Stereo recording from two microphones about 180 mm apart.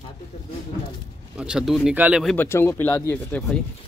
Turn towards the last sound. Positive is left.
turn(degrees=10)  # may be behind; listen again after turning